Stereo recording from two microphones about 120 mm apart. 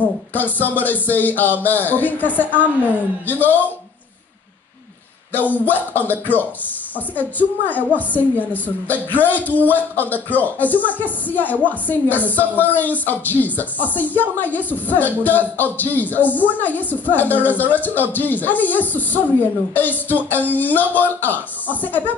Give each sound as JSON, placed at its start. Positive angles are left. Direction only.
{"t": 0.3, "sound": "speech", "side_deg": 15}
{"t": 5.3, "sound": "speech", "side_deg": 15}